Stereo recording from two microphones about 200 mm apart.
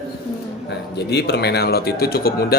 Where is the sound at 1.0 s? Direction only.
55° left (ahead or behind).